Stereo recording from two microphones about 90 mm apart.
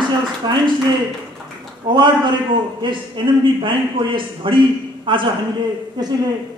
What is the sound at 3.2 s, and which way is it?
A man's voice, 55° right (ahead or behind).